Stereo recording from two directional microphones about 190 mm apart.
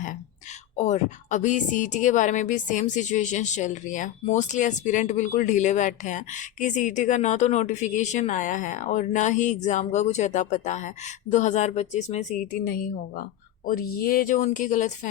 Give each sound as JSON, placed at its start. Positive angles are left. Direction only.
{"t": 0.8, "sound": "speech", "side_deg": 40}